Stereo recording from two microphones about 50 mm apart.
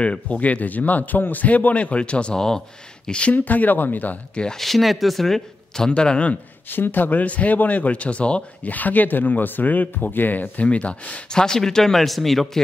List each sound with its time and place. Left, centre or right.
0.0 s speech: left
3.3 s speech: left
4.6 s speech: centre
5.9 s speech: left
6.7 s speech: left
8.6 s speech: left
11.2 s speech: centre